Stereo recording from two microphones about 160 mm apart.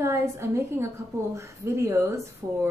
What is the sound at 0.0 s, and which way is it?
A woman's voice, 15° right (ahead or behind).